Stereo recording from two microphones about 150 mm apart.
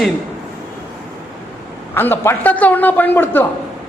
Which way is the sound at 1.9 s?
15° left (ahead or behind).